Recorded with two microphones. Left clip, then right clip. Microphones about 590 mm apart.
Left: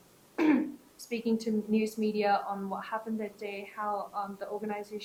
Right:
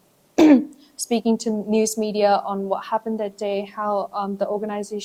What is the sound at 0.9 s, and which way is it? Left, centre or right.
A woman's voice, right.